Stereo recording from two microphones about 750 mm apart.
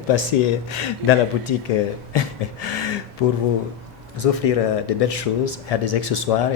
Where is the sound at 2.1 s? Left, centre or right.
Left.